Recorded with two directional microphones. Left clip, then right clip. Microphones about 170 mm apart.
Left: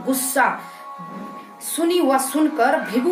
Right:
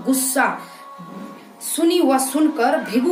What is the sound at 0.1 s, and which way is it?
Speech, 20° right (ahead or behind).